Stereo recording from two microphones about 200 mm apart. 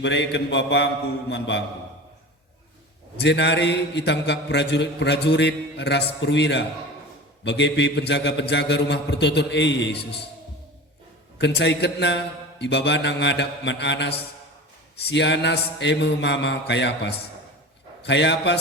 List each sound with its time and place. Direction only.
0.0 s a man's voice: 60° left (ahead or behind)
3.2 s a man's voice: 60° left (ahead or behind)
11.3 s a man's voice: 60° left (ahead or behind)